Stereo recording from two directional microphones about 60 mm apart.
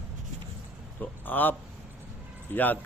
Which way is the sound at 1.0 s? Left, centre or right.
Left.